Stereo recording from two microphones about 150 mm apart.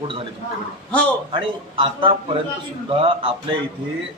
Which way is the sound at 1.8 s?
35° right (ahead or behind).